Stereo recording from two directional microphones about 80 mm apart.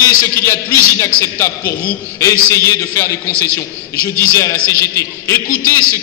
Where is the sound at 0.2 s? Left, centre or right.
Left.